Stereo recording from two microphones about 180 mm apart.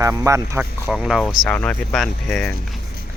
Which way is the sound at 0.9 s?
5° right (ahead or behind).